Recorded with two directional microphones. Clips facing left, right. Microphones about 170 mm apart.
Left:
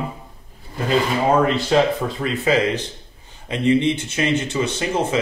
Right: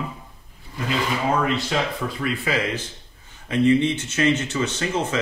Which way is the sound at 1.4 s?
35° left (ahead or behind).